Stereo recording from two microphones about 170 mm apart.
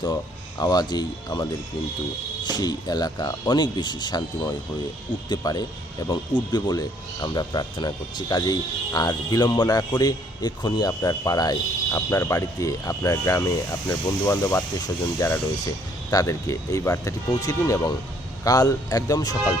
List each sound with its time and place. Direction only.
0.6 s speech: 25° left (ahead or behind)